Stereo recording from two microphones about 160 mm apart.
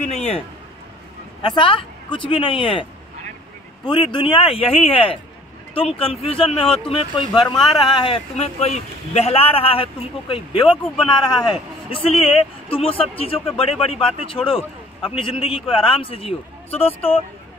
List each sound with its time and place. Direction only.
0.0 s a man's voice: 45° left (ahead or behind)
1.4 s a man's voice: 30° left (ahead or behind)